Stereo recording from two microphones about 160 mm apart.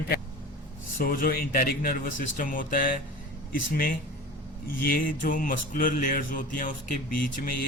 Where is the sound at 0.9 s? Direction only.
60° left (ahead or behind).